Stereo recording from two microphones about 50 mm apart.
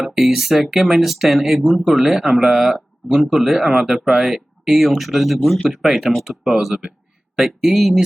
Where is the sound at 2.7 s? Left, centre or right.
Right.